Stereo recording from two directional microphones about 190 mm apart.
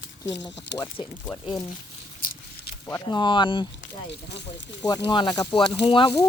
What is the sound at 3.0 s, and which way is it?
Speech, 25° left (ahead or behind).